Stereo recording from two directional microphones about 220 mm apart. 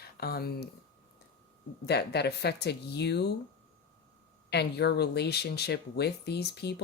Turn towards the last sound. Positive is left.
turn(degrees=50)  # may be behind; listen again after turning